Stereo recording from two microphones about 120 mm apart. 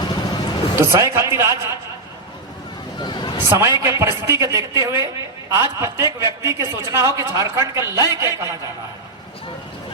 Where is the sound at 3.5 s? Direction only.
25° right (ahead or behind).